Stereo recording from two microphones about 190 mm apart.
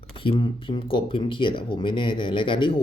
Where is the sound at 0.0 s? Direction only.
25° left (ahead or behind).